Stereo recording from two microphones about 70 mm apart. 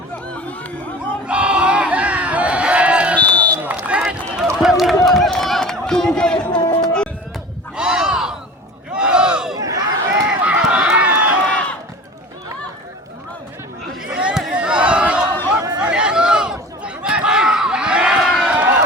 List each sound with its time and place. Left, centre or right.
1.3 s crowd: centre
3.2 s run: centre
3.6 s run: centre
4.6 s a sound: centre
5.0 s run: centre
6.6 s music: left
6.8 s music: centre
7.8 s a sound: centre
8.9 s battle cry: centre
9.6 s a sound: right
10.2 s run: centre
14.0 s a sound: centre
18.2 s run: centre
18.5 s run: right